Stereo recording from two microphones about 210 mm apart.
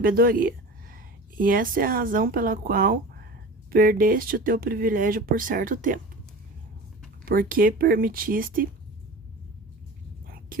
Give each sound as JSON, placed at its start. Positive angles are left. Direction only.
{"t": 0.0, "sound": "speech", "side_deg": -45}
{"t": 7.3, "sound": "speech", "side_deg": -45}
{"t": 10.5, "sound": "speech", "side_deg": -40}